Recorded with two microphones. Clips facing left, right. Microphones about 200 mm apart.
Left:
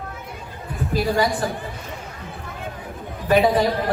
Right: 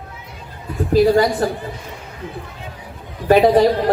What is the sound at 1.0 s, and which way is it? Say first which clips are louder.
Speech: right 7 dB; 50° right (ahead or behind).